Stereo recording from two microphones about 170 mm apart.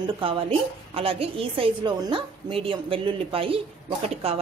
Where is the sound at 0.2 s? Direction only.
35° right (ahead or behind).